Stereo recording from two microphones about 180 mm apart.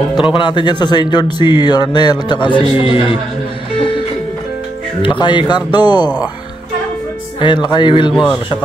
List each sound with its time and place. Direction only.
0.2 s speech: 25° left (ahead or behind)
5.0 s speech: 25° left (ahead or behind)
7.3 s speech: 25° left (ahead or behind)